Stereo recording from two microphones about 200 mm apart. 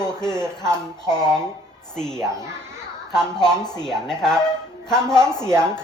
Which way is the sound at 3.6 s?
20° left (ahead or behind).